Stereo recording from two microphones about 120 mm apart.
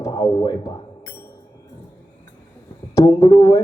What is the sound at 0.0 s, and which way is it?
Speech, 30° left (ahead or behind).